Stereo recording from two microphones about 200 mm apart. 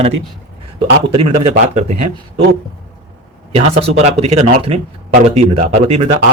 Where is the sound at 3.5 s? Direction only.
30° right (ahead or behind).